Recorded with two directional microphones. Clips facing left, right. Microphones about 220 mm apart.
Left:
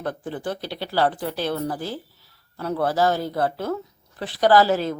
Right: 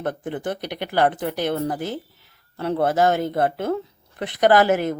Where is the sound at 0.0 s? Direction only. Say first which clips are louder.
Right 2 dB; 20° right (ahead or behind).